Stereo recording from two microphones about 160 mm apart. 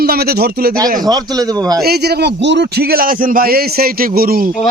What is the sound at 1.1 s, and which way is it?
Speech, 25° right (ahead or behind).